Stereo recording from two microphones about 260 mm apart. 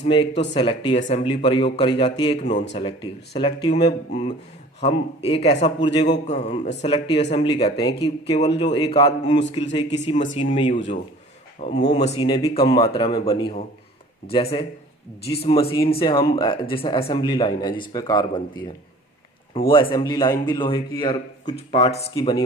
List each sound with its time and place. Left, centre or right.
0.0 s speech: left
11.9 s speech: centre